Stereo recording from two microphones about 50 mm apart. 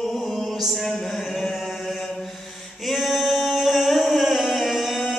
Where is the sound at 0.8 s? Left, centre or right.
Centre.